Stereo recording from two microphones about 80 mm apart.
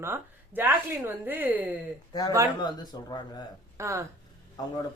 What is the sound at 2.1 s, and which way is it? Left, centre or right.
Speech, left.